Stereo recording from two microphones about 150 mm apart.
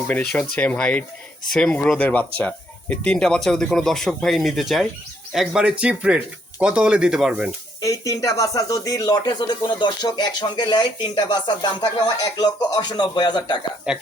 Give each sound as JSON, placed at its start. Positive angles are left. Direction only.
{"t": 0.1, "sound": "speech", "side_deg": 10}
{"t": 7.8, "sound": "speech", "side_deg": 20}
{"t": 13.9, "sound": "speech", "side_deg": -5}